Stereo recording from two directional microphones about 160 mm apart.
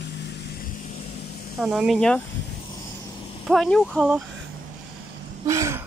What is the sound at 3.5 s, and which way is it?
Speech, centre (ahead or behind).